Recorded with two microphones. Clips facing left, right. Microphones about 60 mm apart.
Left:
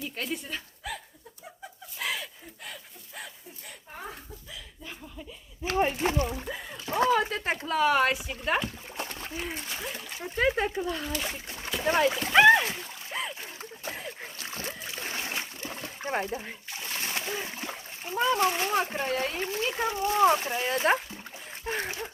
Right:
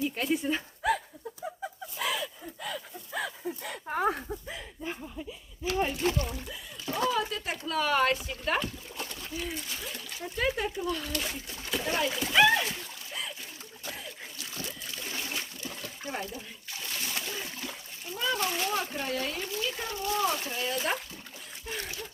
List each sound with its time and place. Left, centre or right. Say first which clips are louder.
0.0 s speech: right 6 dB; centre
3.6 s speech: right 12 dB; right
5.6 s speech: left 2 dB; left
7.1 s speech: left 5 dB; left
7.7 s speech: left 2 dB; centre
8.6 s speech: left 2 dB; left
11.0 s speech: left 2 dB; centre
11.8 s speech: left 6 dB; left
13.1 s splash: left 5 dB; left
20.0 s speech: left 7 dB; left
21.6 s splash: left 6 dB; left